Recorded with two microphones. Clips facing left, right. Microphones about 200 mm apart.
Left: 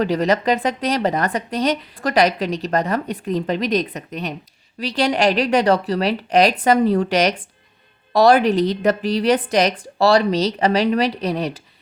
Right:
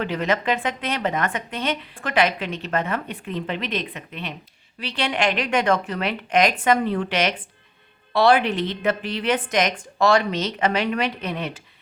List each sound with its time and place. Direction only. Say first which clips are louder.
0.0 s a woman's voice: left 5 dB; 40° left (ahead or behind)